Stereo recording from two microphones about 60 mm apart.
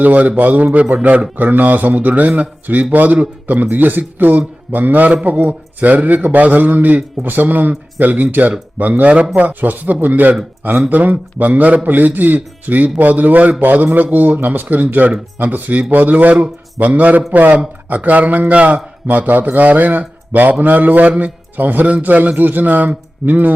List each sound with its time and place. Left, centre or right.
0.0 s speech: right